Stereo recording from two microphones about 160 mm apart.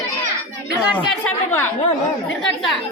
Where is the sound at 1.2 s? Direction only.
10° left (ahead or behind).